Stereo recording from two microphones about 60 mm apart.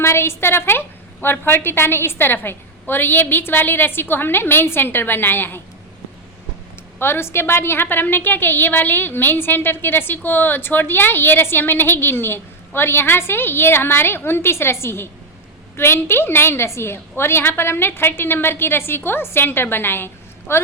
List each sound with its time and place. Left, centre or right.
0.0 s a woman's voice: left
7.0 s a woman's voice: left